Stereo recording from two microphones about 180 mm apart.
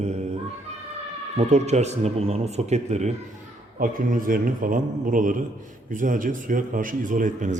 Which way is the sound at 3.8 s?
50° right (ahead or behind).